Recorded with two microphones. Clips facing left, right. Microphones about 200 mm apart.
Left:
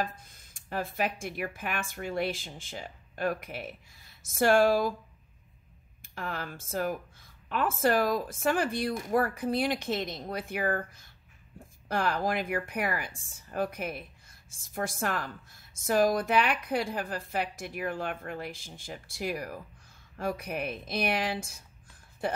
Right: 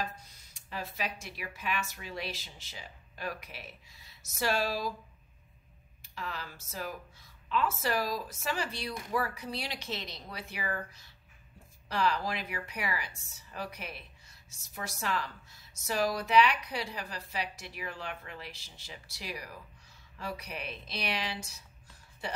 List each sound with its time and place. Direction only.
0.0 s a woman's voice: 50° left (ahead or behind)
6.0 s a woman's voice: 50° left (ahead or behind)